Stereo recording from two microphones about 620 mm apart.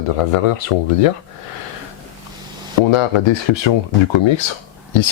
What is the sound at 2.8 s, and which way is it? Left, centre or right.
Speech, left.